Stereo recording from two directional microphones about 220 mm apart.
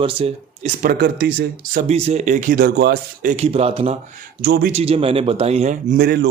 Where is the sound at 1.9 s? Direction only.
30° right (ahead or behind); by 3.3 s 45° right (ahead or behind).